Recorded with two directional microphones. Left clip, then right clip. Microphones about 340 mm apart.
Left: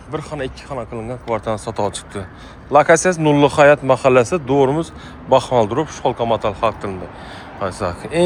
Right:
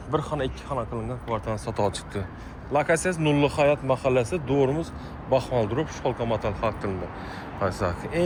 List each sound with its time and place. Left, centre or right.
0.1 s speech: centre
4.5 s speech: left
5.3 s speech: centre